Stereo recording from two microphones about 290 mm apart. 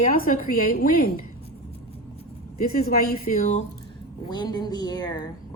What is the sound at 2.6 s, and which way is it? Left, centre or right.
A woman's voice, left.